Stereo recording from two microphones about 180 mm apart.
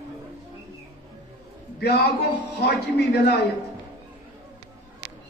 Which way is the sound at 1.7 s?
65° left (ahead or behind).